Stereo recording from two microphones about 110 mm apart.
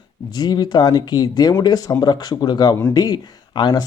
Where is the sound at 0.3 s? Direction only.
40° left (ahead or behind).